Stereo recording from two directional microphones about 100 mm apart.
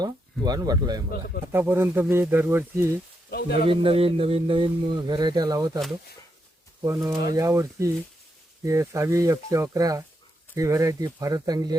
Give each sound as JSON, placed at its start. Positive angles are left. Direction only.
{"t": 0.0, "sound": "speech", "side_deg": -40}
{"t": 1.5, "sound": "speech", "side_deg": -25}
{"t": 3.7, "sound": "speech", "side_deg": -70}
{"t": 6.8, "sound": "speech", "side_deg": -30}